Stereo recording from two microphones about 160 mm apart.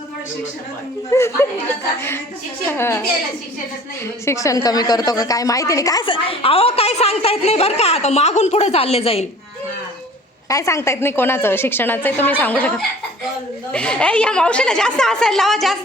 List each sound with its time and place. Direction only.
1.1 s a woman's voice: 15° left (ahead or behind)
4.0 s a woman's voice: 20° left (ahead or behind); by 9.2 s 40° left (ahead or behind)
10.5 s a woman's voice: 20° left (ahead or behind); by 15.8 s centre (ahead or behind)